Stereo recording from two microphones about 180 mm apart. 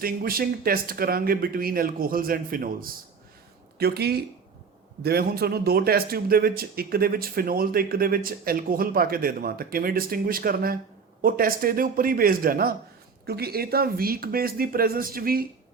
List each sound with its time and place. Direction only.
0.0 s a man's voice: 55° right (ahead or behind)